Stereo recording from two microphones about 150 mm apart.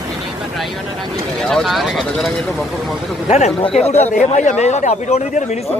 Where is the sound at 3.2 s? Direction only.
45° left (ahead or behind).